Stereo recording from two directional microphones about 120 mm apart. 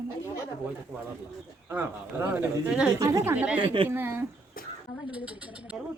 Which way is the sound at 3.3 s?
15° right (ahead or behind).